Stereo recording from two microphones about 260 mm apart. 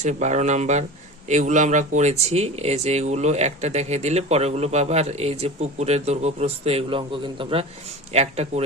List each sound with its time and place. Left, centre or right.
0.0 s speech: right